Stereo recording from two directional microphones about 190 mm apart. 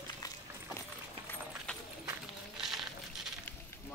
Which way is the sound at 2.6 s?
Centre (ahead or behind).